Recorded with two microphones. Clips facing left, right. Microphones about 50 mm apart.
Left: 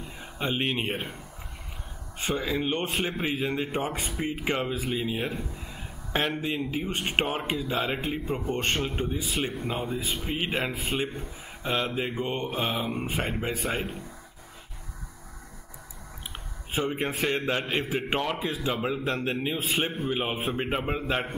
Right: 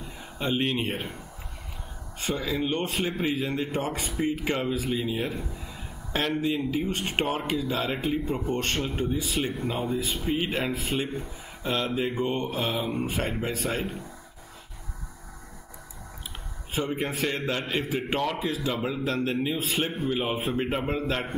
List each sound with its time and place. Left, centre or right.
0.4 s speech: centre
2.1 s a man's voice: left
16.7 s a man's voice: left